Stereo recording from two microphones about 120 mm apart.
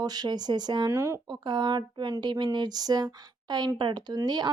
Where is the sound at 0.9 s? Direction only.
20° right (ahead or behind).